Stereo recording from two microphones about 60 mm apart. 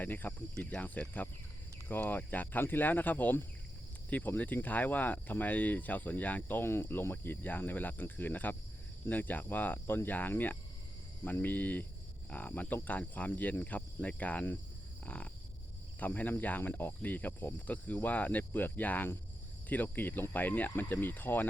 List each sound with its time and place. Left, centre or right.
0.0 s speech: left
0.5 s speech: centre
0.8 s speech: left
15.0 s a sound: left
16.0 s speech: left